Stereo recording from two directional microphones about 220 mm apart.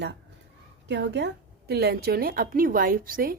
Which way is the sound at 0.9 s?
55° right (ahead or behind).